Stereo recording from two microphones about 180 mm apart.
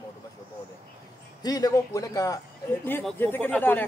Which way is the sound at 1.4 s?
20° left (ahead or behind).